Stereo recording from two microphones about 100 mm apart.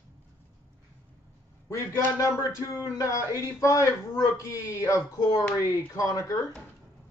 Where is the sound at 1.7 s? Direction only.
30° left (ahead or behind).